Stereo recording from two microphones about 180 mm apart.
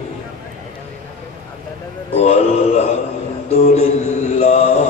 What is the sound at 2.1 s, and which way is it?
Mantra, 40° left (ahead or behind).